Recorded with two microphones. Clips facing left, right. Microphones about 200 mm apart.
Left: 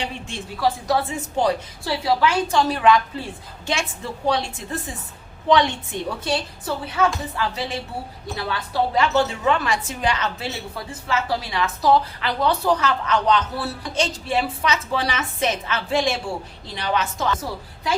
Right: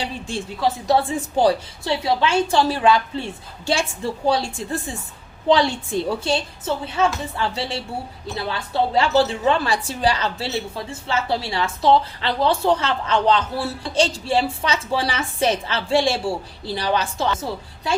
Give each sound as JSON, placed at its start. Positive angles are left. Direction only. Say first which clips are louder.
{"t": 0.0, "sound": "a woman's voice", "louder": "right 3 dB", "side_deg": -35}